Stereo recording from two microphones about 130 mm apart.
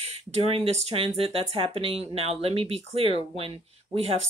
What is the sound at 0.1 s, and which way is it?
Speech, 50° right (ahead or behind).